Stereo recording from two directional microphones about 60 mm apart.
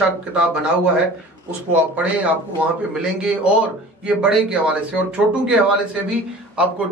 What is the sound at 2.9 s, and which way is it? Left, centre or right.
A man's voice, centre.